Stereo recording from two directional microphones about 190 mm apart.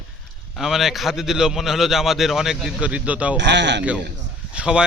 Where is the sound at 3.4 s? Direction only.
65° right (ahead or behind).